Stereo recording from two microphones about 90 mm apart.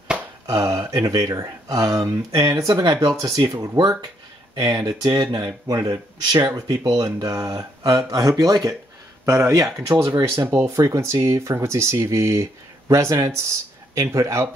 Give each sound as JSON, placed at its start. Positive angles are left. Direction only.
{"t": 0.5, "sound": "speech", "side_deg": -40}
{"t": 3.5, "sound": "speech", "side_deg": -50}